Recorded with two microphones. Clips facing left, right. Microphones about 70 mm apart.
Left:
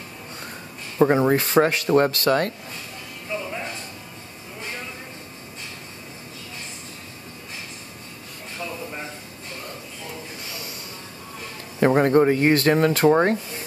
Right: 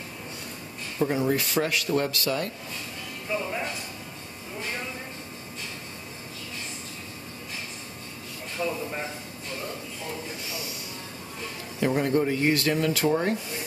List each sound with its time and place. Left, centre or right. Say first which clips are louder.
0.9 s speech: left 8 dB; left
1.3 s speech: left 7 dB; left
3.3 s speech: even; centre
11.8 s speech: left 7 dB; left